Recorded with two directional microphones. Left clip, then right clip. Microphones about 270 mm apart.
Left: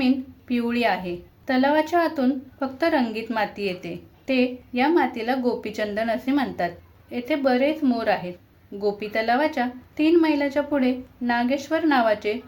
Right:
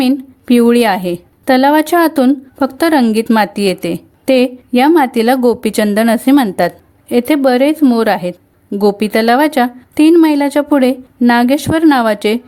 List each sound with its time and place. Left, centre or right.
0.0 s a woman's voice: right